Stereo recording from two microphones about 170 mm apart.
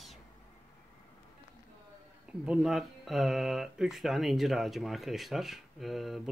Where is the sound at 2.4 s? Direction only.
5° right (ahead or behind).